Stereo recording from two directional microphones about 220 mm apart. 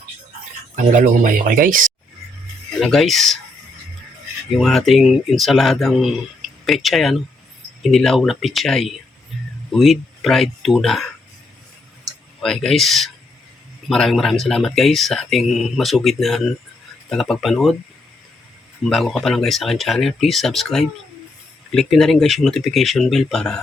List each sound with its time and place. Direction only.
0.9 s speech: 35° right (ahead or behind)
2.8 s speech: centre (ahead or behind)
4.5 s speech: centre (ahead or behind)
12.4 s speech: centre (ahead or behind)
18.8 s speech: centre (ahead or behind)